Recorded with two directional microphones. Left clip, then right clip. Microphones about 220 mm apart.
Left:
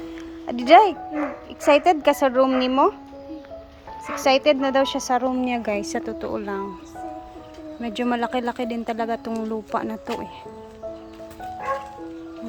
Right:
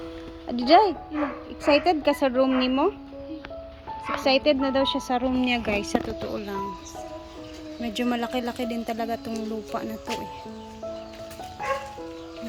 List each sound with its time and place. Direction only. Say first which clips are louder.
0.4 s speech: left 4 dB; 10° left (ahead or behind)
4.0 s speech: left 3 dB; 10° left (ahead or behind)
7.8 s speech: left 3 dB; 15° left (ahead or behind)